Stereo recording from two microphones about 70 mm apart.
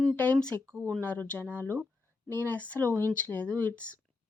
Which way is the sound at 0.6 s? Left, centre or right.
Right.